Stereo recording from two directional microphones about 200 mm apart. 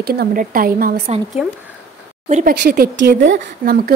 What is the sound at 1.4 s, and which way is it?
Speech, 5° right (ahead or behind).